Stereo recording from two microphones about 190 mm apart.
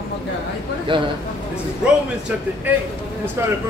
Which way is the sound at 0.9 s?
25° right (ahead or behind).